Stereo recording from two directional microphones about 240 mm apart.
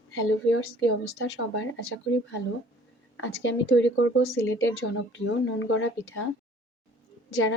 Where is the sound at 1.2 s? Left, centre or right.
Left.